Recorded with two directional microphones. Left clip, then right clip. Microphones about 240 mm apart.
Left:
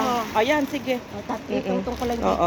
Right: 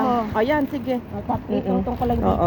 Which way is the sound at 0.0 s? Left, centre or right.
Centre.